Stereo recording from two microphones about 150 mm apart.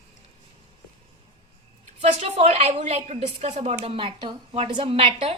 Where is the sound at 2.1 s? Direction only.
45° right (ahead or behind).